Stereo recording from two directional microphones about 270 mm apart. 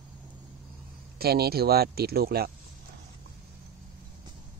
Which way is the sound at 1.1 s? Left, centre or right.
Right.